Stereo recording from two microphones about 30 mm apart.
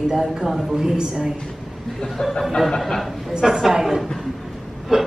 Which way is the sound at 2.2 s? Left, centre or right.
Centre.